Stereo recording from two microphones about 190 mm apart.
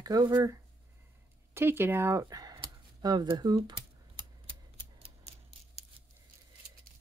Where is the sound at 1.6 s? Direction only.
10° right (ahead or behind).